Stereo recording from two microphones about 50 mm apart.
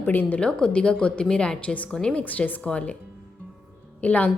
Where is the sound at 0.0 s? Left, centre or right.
Left.